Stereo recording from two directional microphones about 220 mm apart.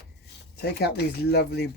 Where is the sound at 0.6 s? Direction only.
45° left (ahead or behind).